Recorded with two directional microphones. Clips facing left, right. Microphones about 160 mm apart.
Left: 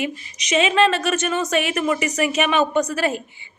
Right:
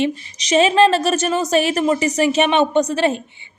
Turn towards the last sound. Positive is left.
turn(degrees=-25)  # may be behind; listen again after turning